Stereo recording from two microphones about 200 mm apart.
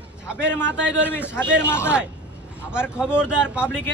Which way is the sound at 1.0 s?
10° left (ahead or behind).